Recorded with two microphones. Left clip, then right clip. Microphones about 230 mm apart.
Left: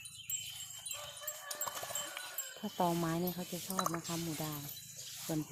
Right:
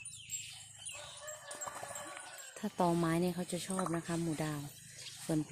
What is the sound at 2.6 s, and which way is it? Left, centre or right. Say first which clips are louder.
Speech: right 2 dB; centre.